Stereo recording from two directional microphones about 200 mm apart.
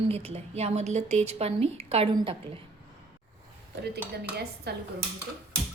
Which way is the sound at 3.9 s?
55° right (ahead or behind).